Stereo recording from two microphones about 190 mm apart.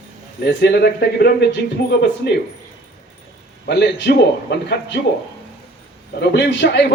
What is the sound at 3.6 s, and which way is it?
A man's voice, 60° left (ahead or behind).